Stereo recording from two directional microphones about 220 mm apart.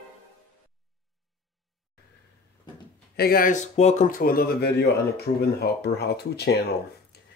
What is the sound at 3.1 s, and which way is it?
Speech, 45° left (ahead or behind).